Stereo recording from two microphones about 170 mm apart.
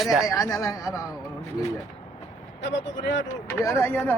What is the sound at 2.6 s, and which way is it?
Speech, 90° left.